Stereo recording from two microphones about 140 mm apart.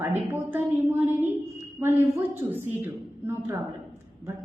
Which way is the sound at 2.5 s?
15° right (ahead or behind).